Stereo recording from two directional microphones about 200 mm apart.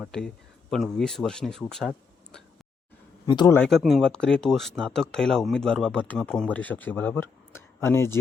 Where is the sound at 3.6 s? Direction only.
Centre (ahead or behind).